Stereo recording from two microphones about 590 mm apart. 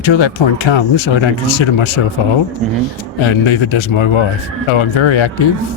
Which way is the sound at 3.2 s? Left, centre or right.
Left.